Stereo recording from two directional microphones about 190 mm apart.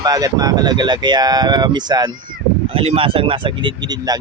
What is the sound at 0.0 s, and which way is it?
Speech, 20° right (ahead or behind).